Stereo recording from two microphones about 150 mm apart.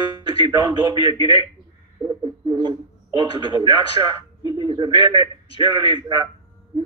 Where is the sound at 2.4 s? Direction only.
30° right (ahead or behind).